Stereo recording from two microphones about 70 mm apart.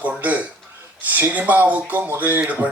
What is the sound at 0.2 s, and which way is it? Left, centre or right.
Speech, right.